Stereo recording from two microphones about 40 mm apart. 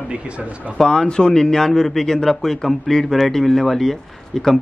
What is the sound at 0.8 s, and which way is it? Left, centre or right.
A man's voice, centre.